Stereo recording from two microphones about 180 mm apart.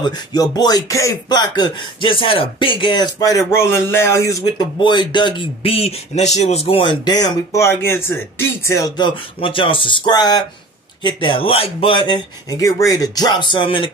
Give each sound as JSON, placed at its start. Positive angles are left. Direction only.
{"t": 0.0, "sound": "speech", "side_deg": 20}